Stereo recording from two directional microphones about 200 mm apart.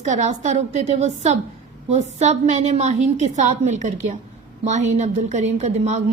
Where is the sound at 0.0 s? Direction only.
35° right (ahead or behind).